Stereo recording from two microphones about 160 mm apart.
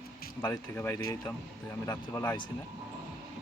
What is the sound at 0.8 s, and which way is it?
Speech, 15° left (ahead or behind).